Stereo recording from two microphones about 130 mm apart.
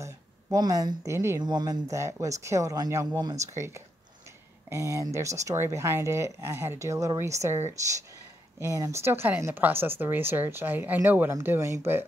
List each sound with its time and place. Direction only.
0.0 s speech: 25° right (ahead or behind)
1.4 s a woman's voice: 35° right (ahead or behind)